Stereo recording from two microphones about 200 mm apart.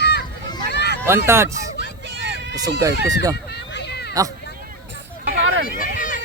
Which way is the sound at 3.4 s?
55° left (ahead or behind).